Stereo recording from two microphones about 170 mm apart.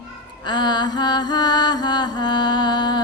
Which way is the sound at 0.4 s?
25° left (ahead or behind).